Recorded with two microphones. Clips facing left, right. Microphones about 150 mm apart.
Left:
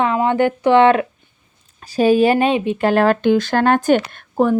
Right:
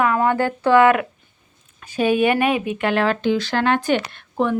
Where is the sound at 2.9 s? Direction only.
45° left (ahead or behind).